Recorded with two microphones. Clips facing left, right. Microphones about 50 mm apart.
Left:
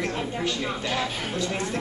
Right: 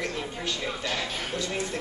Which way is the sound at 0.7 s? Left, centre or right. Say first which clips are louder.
Left 3 dB; centre.